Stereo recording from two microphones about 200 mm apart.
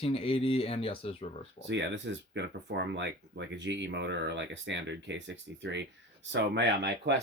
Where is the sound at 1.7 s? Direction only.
65° right (ahead or behind).